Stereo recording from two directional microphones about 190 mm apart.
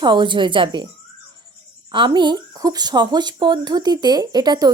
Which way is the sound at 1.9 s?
25° right (ahead or behind).